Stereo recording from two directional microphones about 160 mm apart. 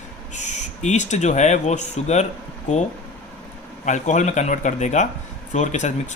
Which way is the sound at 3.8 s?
50° left (ahead or behind).